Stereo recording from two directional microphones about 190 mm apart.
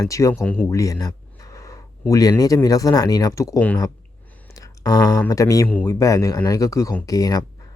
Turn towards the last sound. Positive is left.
turn(degrees=20)  # may be behind; listen again after turning